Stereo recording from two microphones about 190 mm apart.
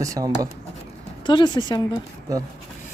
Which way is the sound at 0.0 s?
20° right (ahead or behind).